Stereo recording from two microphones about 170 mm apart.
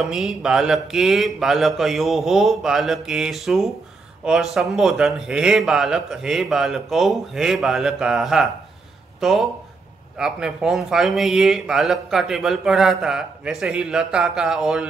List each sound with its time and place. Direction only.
0.0 s speech: 5° right (ahead or behind)